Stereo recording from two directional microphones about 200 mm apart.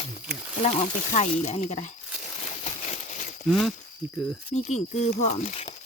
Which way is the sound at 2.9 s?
40° left (ahead or behind).